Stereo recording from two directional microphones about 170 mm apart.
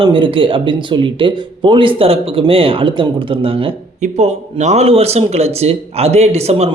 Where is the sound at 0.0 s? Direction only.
30° right (ahead or behind).